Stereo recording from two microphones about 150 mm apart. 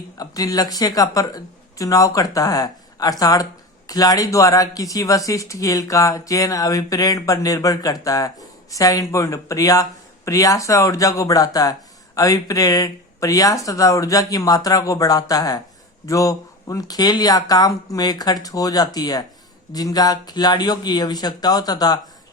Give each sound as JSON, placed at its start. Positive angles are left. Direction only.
{"t": 0.2, "sound": "speech", "side_deg": 25}